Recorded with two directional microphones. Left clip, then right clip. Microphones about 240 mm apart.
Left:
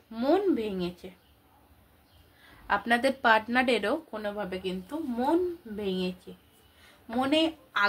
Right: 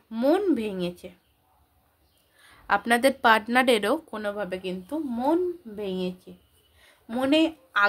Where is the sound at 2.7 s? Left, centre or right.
Right.